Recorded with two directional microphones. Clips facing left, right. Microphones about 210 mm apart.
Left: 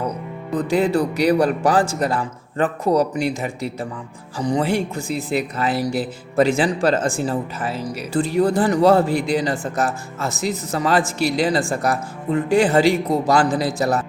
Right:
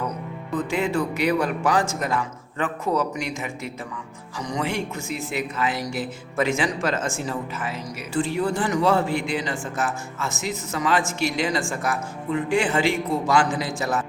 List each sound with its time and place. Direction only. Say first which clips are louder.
0.5 s speech: left 5 dB; 35° left (ahead or behind)